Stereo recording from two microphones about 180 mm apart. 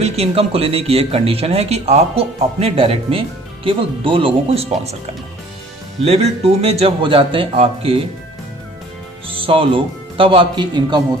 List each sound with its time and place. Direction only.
0.0 s speech: 35° right (ahead or behind)
6.1 s speech: 35° right (ahead or behind)
9.2 s speech: 30° right (ahead or behind)